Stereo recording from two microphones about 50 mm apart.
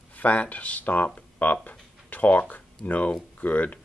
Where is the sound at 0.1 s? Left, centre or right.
Left.